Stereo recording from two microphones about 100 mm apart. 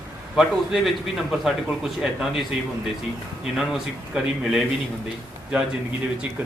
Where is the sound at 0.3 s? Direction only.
Centre (ahead or behind).